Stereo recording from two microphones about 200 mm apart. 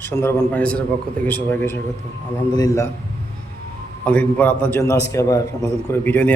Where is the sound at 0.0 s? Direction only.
10° left (ahead or behind).